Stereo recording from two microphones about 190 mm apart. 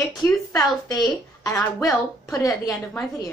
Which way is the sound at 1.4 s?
15° left (ahead or behind).